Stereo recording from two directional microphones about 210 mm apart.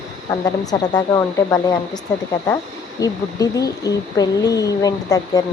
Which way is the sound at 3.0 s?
15° left (ahead or behind).